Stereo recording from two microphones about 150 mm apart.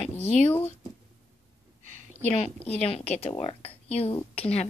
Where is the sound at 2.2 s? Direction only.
40° left (ahead or behind).